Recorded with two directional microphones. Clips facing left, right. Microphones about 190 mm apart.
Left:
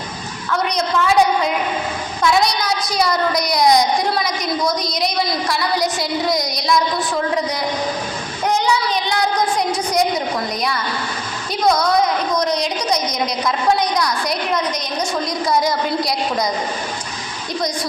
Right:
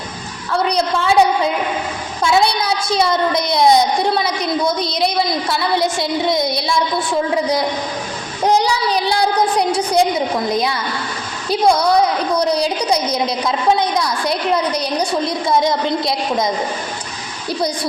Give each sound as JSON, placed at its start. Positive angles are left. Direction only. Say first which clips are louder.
{"t": 0.5, "sound": "a woman's voice", "louder": "right 2 dB", "side_deg": -30}
{"t": 2.2, "sound": "a child's voice", "louder": "right 2 dB", "side_deg": -30}
{"t": 8.4, "sound": "a sound", "louder": "right 3 dB", "side_deg": -35}
{"t": 10.5, "sound": "a child's voice", "louder": "right 3 dB", "side_deg": -25}